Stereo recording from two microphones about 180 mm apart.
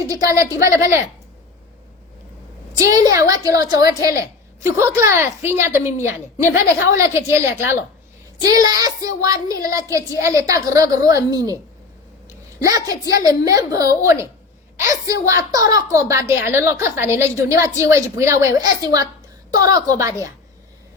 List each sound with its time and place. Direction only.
0.1 s a woman's voice: 15° right (ahead or behind)
2.7 s a woman's voice: 20° right (ahead or behind)